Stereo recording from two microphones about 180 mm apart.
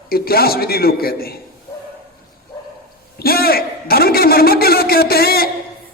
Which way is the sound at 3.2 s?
55° left (ahead or behind).